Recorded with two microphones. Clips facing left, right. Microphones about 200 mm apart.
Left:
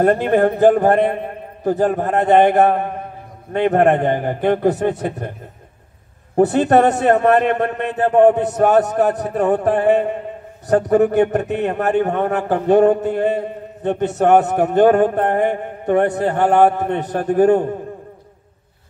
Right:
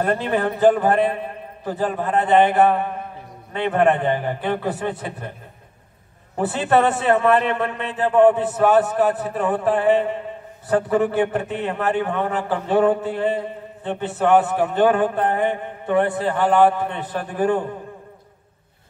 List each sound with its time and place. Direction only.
0.0 s a man's voice: 45° left (ahead or behind)
6.3 s a man's voice: 40° left (ahead or behind)